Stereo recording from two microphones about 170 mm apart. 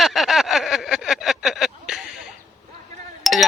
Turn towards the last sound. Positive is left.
turn(degrees=0)  # may be behind; listen again after turning